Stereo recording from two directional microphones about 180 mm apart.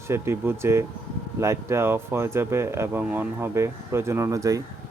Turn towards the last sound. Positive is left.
turn(degrees=-20)  # may be behind; listen again after turning